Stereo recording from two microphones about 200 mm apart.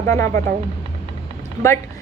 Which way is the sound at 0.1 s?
15° left (ahead or behind).